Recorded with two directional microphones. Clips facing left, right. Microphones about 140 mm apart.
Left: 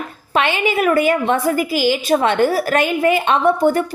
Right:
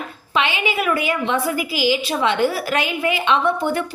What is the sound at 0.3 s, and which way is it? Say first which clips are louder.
A woman's voice: left 4 dB; 50° left (ahead or behind).